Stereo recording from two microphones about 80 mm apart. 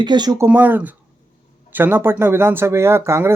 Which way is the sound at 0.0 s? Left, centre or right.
Right.